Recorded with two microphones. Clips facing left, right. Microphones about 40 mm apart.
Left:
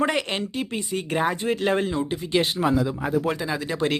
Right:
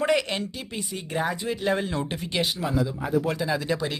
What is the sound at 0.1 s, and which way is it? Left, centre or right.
Speech, left.